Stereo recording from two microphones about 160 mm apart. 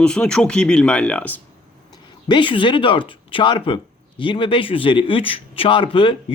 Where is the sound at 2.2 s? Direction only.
30° left (ahead or behind).